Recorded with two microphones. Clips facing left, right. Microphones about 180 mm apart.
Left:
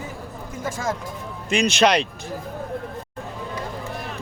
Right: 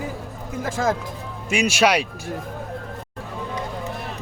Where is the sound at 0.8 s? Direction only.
65° right (ahead or behind).